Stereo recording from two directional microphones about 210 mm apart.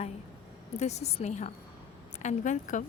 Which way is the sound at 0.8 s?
30° left (ahead or behind).